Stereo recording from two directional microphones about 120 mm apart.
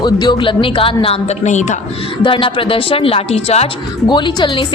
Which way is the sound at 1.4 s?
80° left.